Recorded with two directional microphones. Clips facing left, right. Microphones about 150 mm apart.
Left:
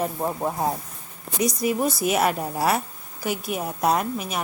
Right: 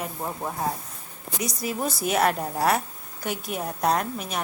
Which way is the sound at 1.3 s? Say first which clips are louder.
Left 7 dB; 20° left (ahead or behind).